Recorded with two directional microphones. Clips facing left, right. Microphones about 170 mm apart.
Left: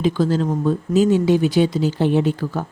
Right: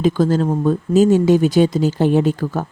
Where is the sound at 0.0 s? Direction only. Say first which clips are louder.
Right 3 dB; 45° right (ahead or behind).